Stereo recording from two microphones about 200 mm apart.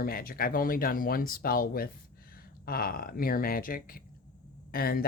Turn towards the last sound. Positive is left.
turn(degrees=50)  # may be behind; listen again after turning